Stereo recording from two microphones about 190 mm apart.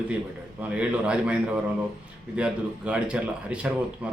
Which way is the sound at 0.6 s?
5° right (ahead or behind).